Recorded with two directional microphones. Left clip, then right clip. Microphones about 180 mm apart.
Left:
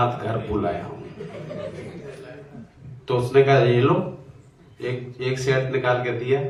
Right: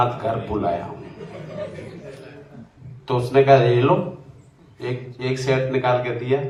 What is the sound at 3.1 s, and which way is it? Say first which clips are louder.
A man's voice: right 3 dB; 25° right (ahead or behind).